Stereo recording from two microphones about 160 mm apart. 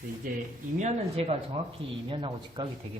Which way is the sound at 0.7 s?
45° right (ahead or behind).